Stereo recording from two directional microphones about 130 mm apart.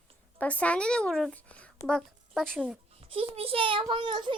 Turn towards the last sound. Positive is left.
turn(degrees=-40)  # may be behind; listen again after turning